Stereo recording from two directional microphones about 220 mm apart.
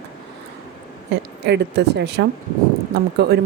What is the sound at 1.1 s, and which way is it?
Speech, 50° right (ahead or behind).